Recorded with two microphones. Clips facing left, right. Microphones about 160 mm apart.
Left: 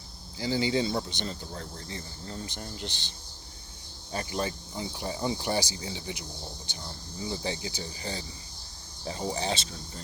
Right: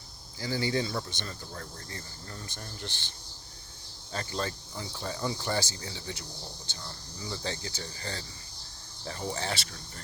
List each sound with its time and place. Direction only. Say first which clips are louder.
0.3 s speech: left 3 dB; 15° left (ahead or behind)